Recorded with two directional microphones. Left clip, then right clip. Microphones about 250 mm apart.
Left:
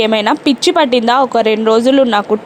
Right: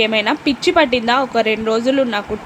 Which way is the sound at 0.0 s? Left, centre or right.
Centre.